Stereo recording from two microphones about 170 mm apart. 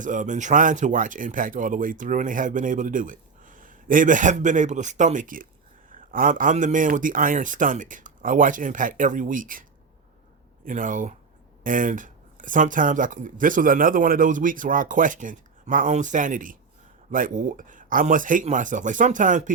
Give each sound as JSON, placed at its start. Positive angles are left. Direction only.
{"t": 0.0, "sound": "speech", "side_deg": -50}
{"t": 10.7, "sound": "speech", "side_deg": -50}